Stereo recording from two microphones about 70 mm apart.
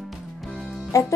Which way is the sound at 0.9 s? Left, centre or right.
Left.